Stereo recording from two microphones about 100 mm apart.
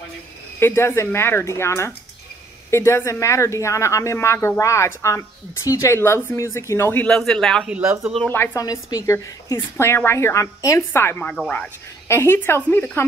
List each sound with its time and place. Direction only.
0.6 s speech: 25° left (ahead or behind)
7.1 s speech: 5° left (ahead or behind)
8.5 s speech: 35° left (ahead or behind); by 12.9 s 20° left (ahead or behind)